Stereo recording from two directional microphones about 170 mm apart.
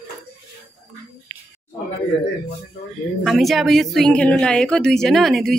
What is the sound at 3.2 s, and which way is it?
Speech, centre (ahead or behind).